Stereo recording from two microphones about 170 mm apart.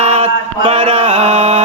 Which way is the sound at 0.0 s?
40° right (ahead or behind).